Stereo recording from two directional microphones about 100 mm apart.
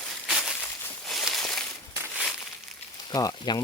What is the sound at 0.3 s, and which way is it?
Crushing, 5° right (ahead or behind).